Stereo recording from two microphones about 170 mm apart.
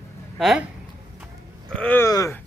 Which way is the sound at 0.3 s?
Centre (ahead or behind).